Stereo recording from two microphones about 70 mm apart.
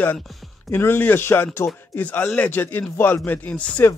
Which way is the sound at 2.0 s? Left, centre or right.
Left.